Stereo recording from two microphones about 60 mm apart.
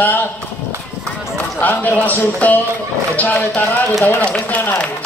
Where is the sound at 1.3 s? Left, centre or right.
Left.